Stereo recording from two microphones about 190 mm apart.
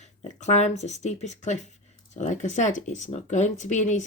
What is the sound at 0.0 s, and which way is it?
Speech, 40° left (ahead or behind).